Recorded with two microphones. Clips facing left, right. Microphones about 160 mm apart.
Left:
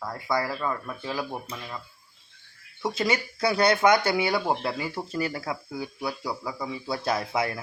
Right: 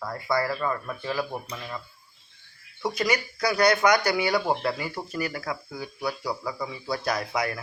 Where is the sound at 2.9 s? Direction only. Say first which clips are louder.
Even; 25° left (ahead or behind).